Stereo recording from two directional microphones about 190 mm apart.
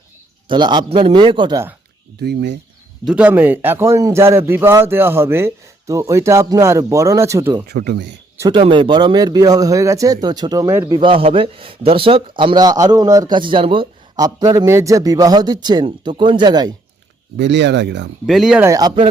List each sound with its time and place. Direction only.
0.4 s a man's voice: 25° right (ahead or behind)
2.2 s speech: 60° right (ahead or behind)
3.0 s a man's voice: 5° right (ahead or behind)
7.7 s speech: 60° right (ahead or behind)
8.4 s a man's voice: 25° right (ahead or behind)
17.3 s speech: 70° right (ahead or behind)
18.3 s speech: centre (ahead or behind)
18.6 s a man's voice: 20° right (ahead or behind)